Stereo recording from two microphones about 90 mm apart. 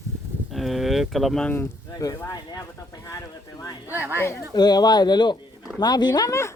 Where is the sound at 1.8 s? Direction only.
40° left (ahead or behind).